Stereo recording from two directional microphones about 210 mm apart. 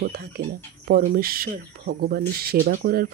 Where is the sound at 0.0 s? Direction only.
50° right (ahead or behind).